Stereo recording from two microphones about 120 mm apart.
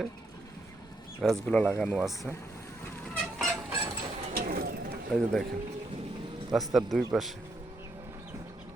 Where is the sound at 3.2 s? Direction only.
Centre (ahead or behind).